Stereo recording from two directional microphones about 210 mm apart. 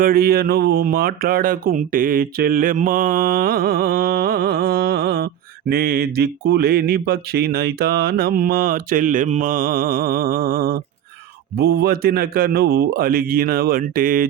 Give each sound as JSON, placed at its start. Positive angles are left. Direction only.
{"t": 0.0, "sound": "speech", "side_deg": -45}